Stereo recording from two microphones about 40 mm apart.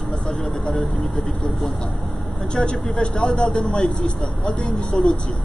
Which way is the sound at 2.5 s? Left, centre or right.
Left.